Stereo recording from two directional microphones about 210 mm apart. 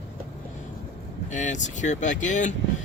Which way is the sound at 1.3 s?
35° left (ahead or behind).